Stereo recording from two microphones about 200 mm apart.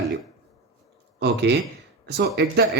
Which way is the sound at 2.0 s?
55° right (ahead or behind).